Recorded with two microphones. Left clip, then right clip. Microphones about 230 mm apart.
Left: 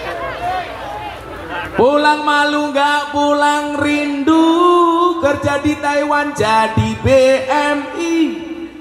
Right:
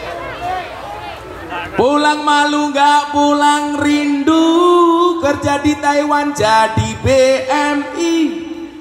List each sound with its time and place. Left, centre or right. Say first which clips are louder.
1.8 s music: left 1 dB; right